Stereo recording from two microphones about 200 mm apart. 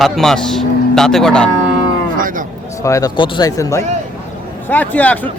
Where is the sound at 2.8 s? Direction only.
15° left (ahead or behind).